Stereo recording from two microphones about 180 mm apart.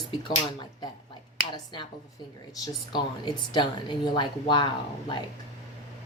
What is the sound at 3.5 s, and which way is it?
Speech, 25° left (ahead or behind).